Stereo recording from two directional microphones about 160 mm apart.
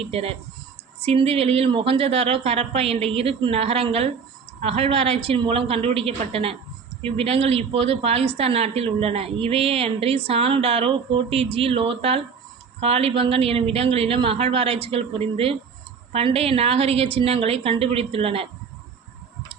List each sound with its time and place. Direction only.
0.0 s a woman's voice: 40° right (ahead or behind)